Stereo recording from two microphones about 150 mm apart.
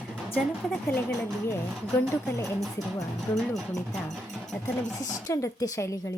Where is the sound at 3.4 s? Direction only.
5° left (ahead or behind).